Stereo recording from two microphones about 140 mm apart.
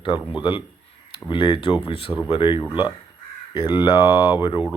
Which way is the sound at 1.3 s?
35° left (ahead or behind).